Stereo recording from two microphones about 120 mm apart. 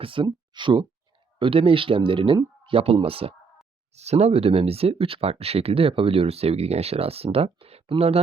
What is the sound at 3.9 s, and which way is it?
Speech, 65° right (ahead or behind).